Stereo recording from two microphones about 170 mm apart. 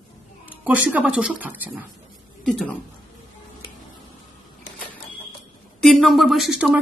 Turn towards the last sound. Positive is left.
turn(degrees=-5)  # may be behind; listen again after turning